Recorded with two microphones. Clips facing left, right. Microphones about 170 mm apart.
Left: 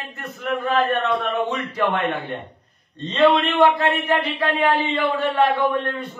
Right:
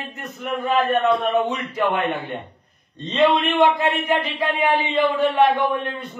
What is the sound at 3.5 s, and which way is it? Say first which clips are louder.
A man's voice: left 1 dB; 10° right (ahead or behind).